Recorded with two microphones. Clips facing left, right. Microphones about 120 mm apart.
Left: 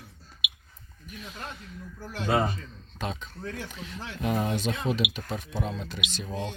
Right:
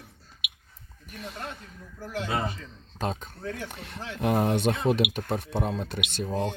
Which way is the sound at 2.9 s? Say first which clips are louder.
Right 3 dB; 40° right (ahead or behind).